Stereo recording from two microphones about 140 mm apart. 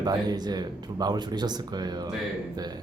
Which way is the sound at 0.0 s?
30° right (ahead or behind).